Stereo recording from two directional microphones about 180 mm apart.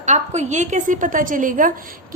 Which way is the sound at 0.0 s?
40° right (ahead or behind).